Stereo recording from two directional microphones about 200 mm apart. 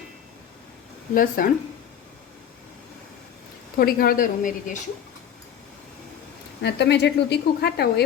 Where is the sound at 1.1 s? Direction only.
45° left (ahead or behind).